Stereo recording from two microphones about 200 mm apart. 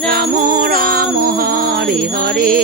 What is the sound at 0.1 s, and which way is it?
Music, 45° right (ahead or behind).